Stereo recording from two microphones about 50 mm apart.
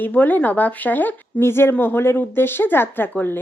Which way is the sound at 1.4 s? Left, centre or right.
Left.